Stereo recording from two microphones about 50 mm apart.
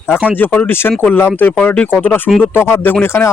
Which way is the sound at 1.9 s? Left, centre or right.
Left.